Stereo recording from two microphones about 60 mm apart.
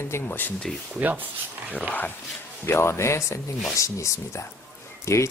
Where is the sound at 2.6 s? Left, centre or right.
Left.